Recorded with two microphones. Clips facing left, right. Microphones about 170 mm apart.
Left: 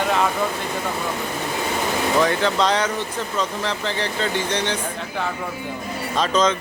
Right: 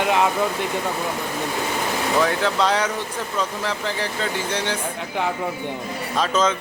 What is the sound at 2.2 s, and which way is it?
Speech, 5° right (ahead or behind).